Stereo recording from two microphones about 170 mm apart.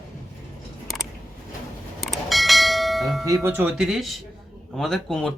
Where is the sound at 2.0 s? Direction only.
Centre (ahead or behind).